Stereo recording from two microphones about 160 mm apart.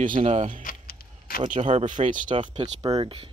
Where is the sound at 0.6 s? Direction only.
60° left (ahead or behind).